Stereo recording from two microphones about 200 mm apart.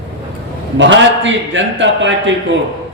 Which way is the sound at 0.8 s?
65° right (ahead or behind).